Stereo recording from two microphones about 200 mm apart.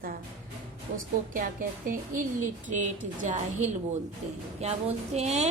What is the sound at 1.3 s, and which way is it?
A woman's voice, 45° right (ahead or behind).